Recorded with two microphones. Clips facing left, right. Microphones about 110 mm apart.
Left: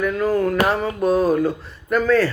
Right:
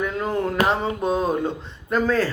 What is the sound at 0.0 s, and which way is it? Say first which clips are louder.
Speech: left 5 dB; 25° right (ahead or behind).